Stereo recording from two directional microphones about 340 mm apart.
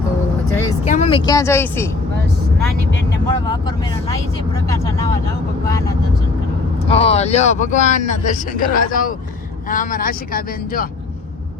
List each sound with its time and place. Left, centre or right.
0.9 s speech: centre
3.5 s speech: centre
6.8 s speech: centre